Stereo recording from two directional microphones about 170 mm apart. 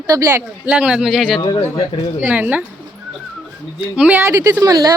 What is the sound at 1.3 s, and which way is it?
Speech, 25° left (ahead or behind).